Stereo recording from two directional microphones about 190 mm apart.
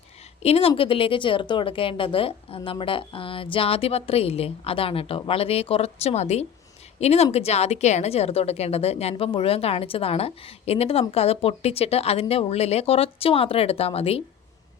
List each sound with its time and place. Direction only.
0.4 s a woman's voice: 30° left (ahead or behind)